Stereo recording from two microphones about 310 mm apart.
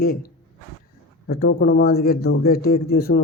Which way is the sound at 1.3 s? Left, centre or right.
Left.